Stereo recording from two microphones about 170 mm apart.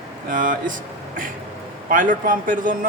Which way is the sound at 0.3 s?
55° right (ahead or behind).